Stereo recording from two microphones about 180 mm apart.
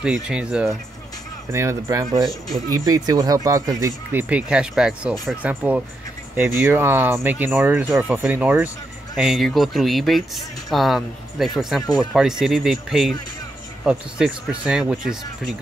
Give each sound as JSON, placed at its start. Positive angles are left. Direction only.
{"t": 0.0, "sound": "speech", "side_deg": -5}